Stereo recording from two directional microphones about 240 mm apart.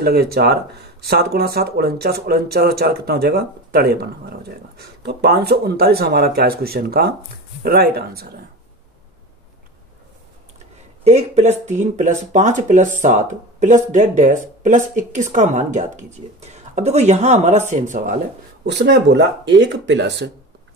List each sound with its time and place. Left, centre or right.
0.0 s speech: right
11.1 s speech: right
18.7 s speech: right